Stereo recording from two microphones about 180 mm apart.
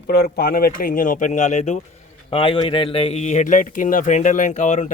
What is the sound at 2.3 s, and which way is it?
Speech, 30° left (ahead or behind).